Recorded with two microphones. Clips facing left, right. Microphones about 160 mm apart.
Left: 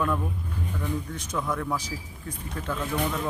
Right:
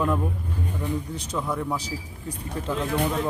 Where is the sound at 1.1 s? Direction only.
35° right (ahead or behind).